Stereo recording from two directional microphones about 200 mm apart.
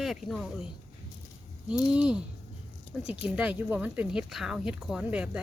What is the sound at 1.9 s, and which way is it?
Speech, 5° right (ahead or behind).